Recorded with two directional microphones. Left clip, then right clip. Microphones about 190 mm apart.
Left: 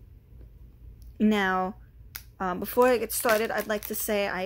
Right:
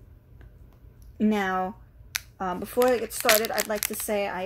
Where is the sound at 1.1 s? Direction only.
5° left (ahead or behind).